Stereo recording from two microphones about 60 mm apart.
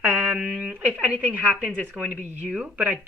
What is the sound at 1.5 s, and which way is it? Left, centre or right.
Speech, centre.